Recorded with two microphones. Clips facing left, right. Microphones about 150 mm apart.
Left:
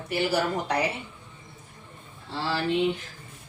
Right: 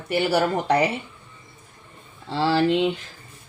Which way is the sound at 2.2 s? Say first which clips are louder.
Right 8 dB; 90° right.